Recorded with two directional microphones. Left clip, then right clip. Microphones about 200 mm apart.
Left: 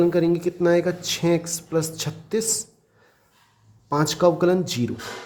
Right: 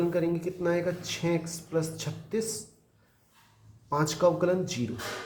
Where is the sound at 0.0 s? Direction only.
45° left (ahead or behind).